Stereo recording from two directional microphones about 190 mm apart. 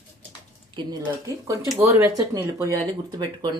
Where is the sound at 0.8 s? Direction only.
20° right (ahead or behind).